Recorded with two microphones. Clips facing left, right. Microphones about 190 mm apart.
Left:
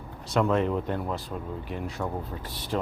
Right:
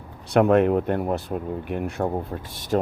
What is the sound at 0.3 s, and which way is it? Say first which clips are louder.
Speech: right 7 dB; 60° right (ahead or behind).